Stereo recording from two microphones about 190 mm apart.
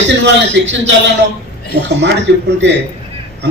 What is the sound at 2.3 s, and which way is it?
Speech, 65° right (ahead or behind).